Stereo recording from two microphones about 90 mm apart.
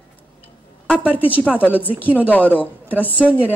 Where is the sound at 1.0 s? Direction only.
15° right (ahead or behind).